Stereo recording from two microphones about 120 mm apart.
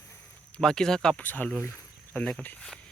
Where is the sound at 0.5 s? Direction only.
5° left (ahead or behind).